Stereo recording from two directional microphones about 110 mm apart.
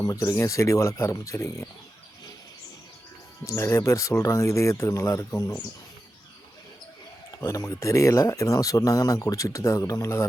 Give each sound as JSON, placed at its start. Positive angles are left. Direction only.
{"t": 0.0, "sound": "speech", "side_deg": 30}
{"t": 3.4, "sound": "speech", "side_deg": 25}
{"t": 7.4, "sound": "speech", "side_deg": 30}